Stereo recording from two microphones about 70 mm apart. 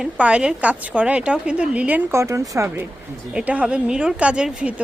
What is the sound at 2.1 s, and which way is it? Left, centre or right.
Speech, right.